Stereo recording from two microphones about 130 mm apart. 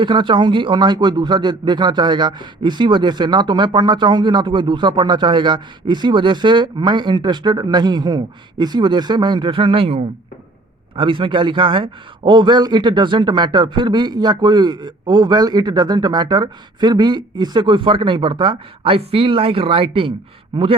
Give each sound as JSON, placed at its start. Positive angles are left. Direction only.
{"t": 0.0, "sound": "speech", "side_deg": -40}